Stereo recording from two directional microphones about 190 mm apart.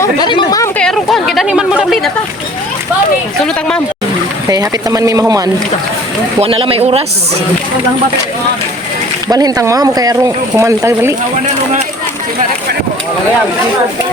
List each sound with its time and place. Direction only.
0.0 s speech: 25° left (ahead or behind)
0.8 s speech: 5° left (ahead or behind)
4.4 s speech: 20° right (ahead or behind)
6.4 s speech: 30° right (ahead or behind)
9.3 s speech: 20° right (ahead or behind)